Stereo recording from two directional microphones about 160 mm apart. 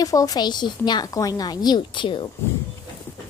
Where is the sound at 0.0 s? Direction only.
20° left (ahead or behind).